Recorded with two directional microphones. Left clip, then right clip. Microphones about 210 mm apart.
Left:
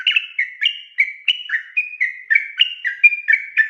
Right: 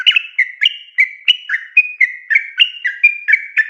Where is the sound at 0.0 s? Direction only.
20° right (ahead or behind).